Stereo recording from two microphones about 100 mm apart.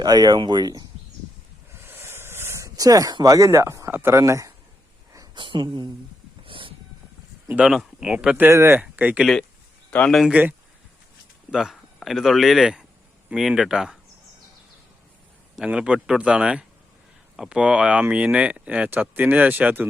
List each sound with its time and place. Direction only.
0.0 s speech: 45° right (ahead or behind)
1.7 s a sound: 25° right (ahead or behind)
4.2 s speech: 30° right (ahead or behind)
5.3 s speech: 55° right (ahead or behind)
6.4 s wild animals: 60° right (ahead or behind)
7.4 s speech: 10° right (ahead or behind)
8.4 s speech: 25° right (ahead or behind)
8.8 s speech: 15° right (ahead or behind)
10.1 s speech: centre (ahead or behind)
11.5 s speech: centre (ahead or behind)
15.5 s speech: 10° right (ahead or behind)